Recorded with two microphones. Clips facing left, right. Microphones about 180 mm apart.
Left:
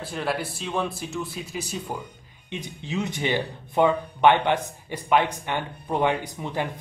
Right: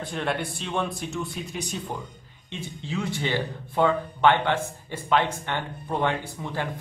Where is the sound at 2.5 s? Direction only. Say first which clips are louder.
Left 2 dB; 15° left (ahead or behind).